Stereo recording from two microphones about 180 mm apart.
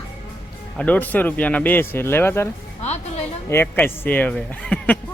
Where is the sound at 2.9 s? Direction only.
35° left (ahead or behind).